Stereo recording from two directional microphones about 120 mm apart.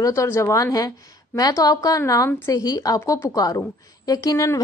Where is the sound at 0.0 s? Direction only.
25° left (ahead or behind).